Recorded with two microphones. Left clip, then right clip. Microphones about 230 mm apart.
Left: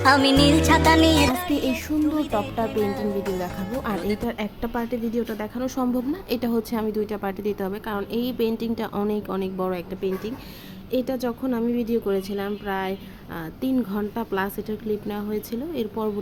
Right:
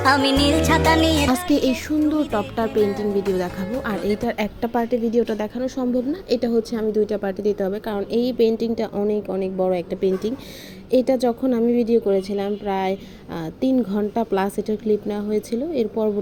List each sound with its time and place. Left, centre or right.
0.0 s a woman's voice: centre
3.3 s a woman's voice: centre
3.9 s a woman's voice: centre
4.2 s a woman's voice: centre
5.5 s a woman's voice: centre
9.9 s a woman's voice: centre